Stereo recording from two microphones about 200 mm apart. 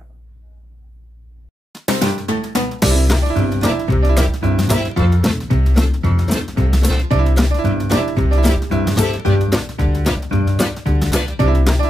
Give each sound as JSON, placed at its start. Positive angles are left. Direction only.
{"t": 1.7, "sound": "music", "side_deg": 0}